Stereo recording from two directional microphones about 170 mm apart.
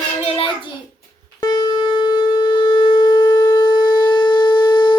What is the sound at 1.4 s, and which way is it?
Shofar, 25° left (ahead or behind).